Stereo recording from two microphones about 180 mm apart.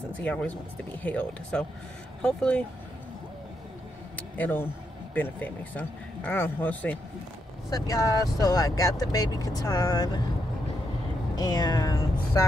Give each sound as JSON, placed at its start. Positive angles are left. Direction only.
{"t": 0.1, "sound": "speech", "side_deg": 10}
{"t": 4.4, "sound": "speech", "side_deg": 10}
{"t": 7.7, "sound": "speech", "side_deg": 20}
{"t": 11.3, "sound": "speech", "side_deg": 20}